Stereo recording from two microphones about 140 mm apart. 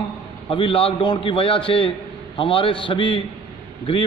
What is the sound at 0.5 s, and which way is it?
A man's voice, 40° left (ahead or behind).